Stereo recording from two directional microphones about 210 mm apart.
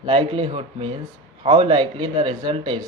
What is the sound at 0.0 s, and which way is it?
Speech, 25° right (ahead or behind).